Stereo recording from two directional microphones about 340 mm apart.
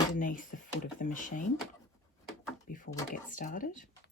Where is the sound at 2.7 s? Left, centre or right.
Left.